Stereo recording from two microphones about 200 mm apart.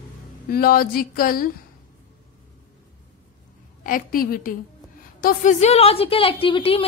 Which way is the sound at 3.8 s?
45° left (ahead or behind).